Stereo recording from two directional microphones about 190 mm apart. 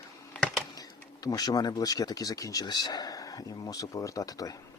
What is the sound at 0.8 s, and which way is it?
Speech, 20° left (ahead or behind).